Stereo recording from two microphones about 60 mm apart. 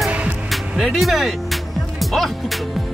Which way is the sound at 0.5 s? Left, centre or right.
Centre.